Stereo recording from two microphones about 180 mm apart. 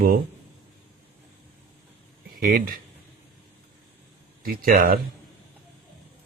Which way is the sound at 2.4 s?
55° right (ahead or behind).